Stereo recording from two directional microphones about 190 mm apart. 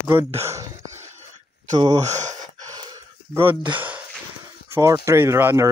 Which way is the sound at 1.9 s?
35° right (ahead or behind).